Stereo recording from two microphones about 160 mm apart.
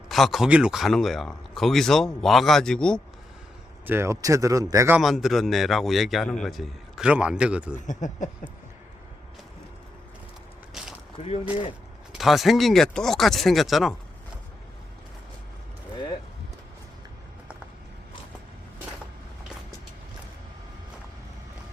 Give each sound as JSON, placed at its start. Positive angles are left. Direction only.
{"t": 0.1, "sound": "speech", "side_deg": 0}
{"t": 3.8, "sound": "speech", "side_deg": -15}
{"t": 4.9, "sound": "speech", "side_deg": 0}
{"t": 7.9, "sound": "speech", "side_deg": 50}
{"t": 10.8, "sound": "a sound", "side_deg": -5}
{"t": 11.2, "sound": "speech", "side_deg": 45}
{"t": 12.1, "sound": "speech", "side_deg": 0}